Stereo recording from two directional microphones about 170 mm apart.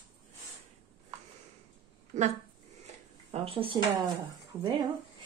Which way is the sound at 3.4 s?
35° right (ahead or behind).